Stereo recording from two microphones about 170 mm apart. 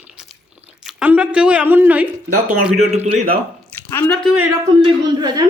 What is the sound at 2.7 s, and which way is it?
Speech, 40° right (ahead or behind).